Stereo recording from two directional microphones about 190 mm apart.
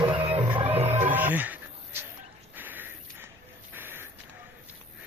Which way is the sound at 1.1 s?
10° right (ahead or behind).